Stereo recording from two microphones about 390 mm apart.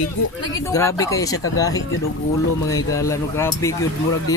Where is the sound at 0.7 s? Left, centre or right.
Centre.